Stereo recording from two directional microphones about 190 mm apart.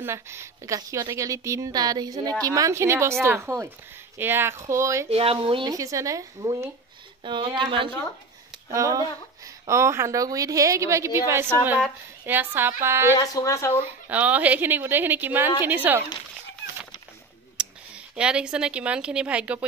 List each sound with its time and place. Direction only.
0.0 s a woman's voice: 15° right (ahead or behind)
5.1 s a woman's voice: 30° right (ahead or behind); by 13.1 s 15° right (ahead or behind)
13.2 s speech: 20° left (ahead or behind)
14.0 s a woman's voice: 10° right (ahead or behind)
17.6 s speech: 5° right (ahead or behind)